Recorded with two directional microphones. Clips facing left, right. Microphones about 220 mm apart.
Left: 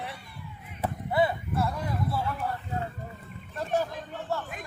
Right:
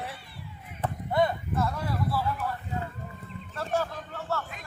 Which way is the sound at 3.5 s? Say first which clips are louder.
Left 1 dB; 15° left (ahead or behind).